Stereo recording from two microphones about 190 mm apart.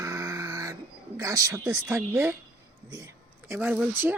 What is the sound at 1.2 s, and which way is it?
A woman's voice, 15° right (ahead or behind).